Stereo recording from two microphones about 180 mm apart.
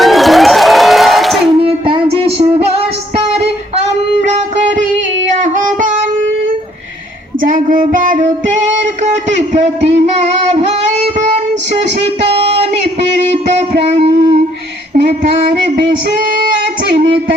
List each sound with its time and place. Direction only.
0.0 s a sound: centre (ahead or behind)
1.5 s child singing: 30° right (ahead or behind)
4.2 s music: 40° right (ahead or behind)
5.4 s child singing: 45° right (ahead or behind)
7.5 s child singing: 45° right (ahead or behind)
10.1 s music: 40° right (ahead or behind)
12.3 s a sound: 35° right (ahead or behind)
13.3 s music: 35° right (ahead or behind)